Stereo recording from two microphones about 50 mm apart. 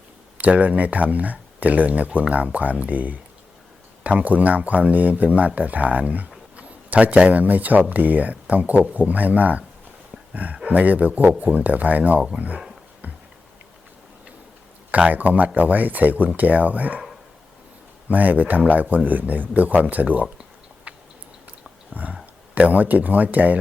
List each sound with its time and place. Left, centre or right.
0.3 s speech: right
14.8 s speech: right
18.1 s speech: right
20.9 s a sound: right
21.9 s speech: right